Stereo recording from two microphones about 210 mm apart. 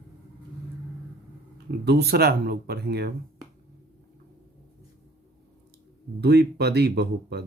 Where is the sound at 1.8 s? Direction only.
50° right (ahead or behind).